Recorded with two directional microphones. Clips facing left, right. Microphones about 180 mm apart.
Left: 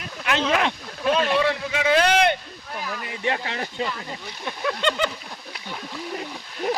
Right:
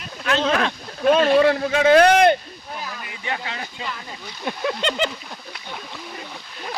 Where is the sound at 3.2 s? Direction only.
35° left (ahead or behind).